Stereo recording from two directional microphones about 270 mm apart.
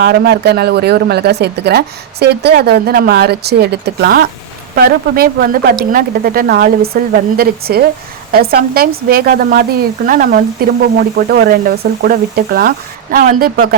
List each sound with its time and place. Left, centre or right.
0.0 s speech: right